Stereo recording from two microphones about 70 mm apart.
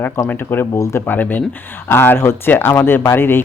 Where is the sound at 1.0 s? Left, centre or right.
Left.